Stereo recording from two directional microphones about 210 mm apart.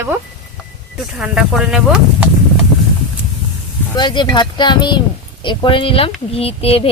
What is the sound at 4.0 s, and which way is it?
Speech, 20° left (ahead or behind).